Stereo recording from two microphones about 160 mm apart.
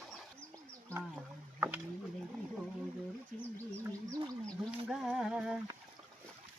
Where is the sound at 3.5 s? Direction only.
20° right (ahead or behind).